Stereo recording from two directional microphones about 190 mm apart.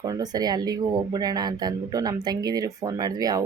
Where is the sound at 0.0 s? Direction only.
20° right (ahead or behind).